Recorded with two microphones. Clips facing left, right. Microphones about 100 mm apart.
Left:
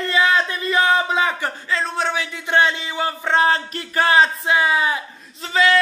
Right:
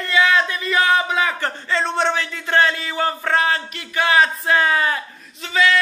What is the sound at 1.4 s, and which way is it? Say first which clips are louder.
A man's voice: right 1 dB; 5° left (ahead or behind).